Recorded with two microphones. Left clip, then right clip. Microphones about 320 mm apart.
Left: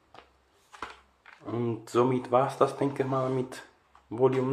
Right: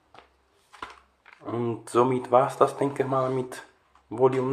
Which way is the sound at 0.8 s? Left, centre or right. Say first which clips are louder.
Right 1 dB; centre.